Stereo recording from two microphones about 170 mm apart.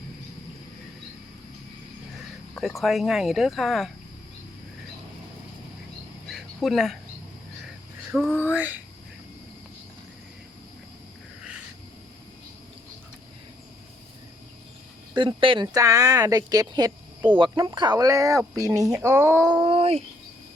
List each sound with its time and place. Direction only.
2.6 s speech: centre (ahead or behind)
6.3 s a sound: centre (ahead or behind)
8.1 s speech: centre (ahead or behind)
15.1 s speech: 30° right (ahead or behind)
15.6 s speech: 20° right (ahead or behind)
19.5 s speech: 30° right (ahead or behind)